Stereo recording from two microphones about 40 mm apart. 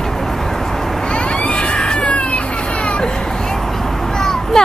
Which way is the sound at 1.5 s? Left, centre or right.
Left.